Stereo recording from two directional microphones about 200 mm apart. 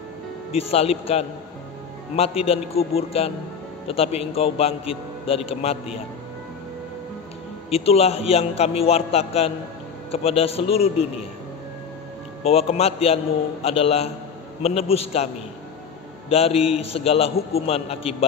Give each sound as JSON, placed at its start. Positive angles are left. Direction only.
{"t": 0.5, "sound": "a man's voice", "side_deg": 30}
{"t": 7.7, "sound": "a man's voice", "side_deg": 30}
{"t": 12.4, "sound": "a man's voice", "side_deg": 30}
{"t": 16.3, "sound": "a man's voice", "side_deg": 30}